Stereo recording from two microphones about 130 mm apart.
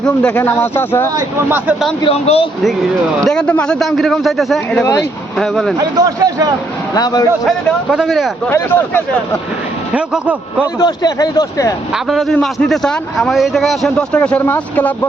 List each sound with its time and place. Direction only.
0.0 s speech: 10° left (ahead or behind)
1.5 s a man's voice: 15° right (ahead or behind)
2.0 s a man's voice: 45° left (ahead or behind)
3.2 s a man's voice: 5° left (ahead or behind)
5.8 s speech: 30° right (ahead or behind)
6.9 s a man's voice: 30° left (ahead or behind)
7.4 s a man's voice: centre (ahead or behind)
8.4 s speech: 15° left (ahead or behind)
9.9 s a man's voice: 10° right (ahead or behind)
10.8 s speech: 30° left (ahead or behind)
12.0 s a man's voice: centre (ahead or behind)